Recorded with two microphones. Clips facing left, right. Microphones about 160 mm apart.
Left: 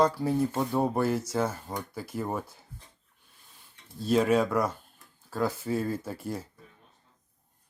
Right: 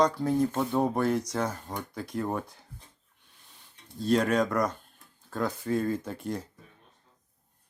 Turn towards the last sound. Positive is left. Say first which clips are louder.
# right 1 dB
turn(degrees=5)  # may be behind; listen again after turning